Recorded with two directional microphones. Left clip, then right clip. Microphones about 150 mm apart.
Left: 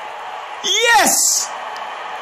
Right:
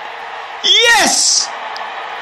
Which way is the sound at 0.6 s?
Centre (ahead or behind).